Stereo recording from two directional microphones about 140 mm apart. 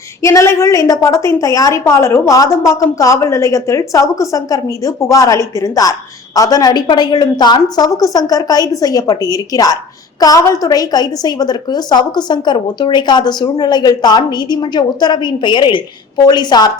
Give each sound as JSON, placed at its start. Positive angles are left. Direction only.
{"t": 0.2, "sound": "a woman's voice", "side_deg": 20}